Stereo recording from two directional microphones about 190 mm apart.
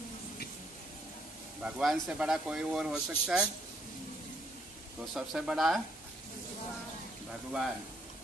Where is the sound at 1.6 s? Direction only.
Centre (ahead or behind).